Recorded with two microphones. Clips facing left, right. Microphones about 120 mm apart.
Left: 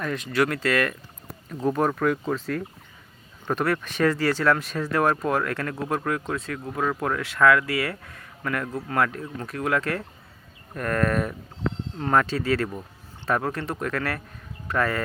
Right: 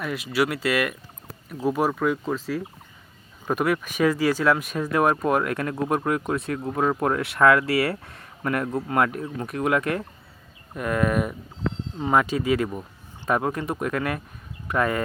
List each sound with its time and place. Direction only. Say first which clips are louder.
0.0 s speech: even; 10° right (ahead or behind)